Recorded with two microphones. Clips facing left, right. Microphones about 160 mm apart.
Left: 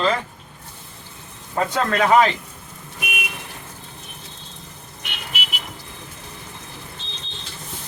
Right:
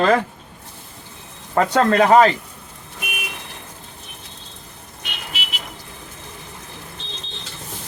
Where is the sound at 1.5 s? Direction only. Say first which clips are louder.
Right 5 dB; 60° right (ahead or behind).